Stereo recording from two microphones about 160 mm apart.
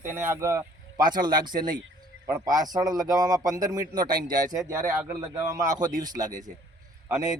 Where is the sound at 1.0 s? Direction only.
60° right (ahead or behind).